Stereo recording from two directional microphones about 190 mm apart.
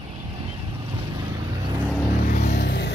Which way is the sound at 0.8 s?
20° right (ahead or behind).